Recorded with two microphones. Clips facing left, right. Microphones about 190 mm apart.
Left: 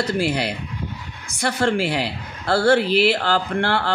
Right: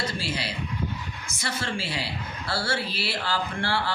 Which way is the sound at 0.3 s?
65° left (ahead or behind).